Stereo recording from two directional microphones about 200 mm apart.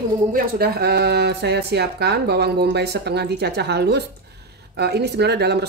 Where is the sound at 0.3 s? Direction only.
50° right (ahead or behind).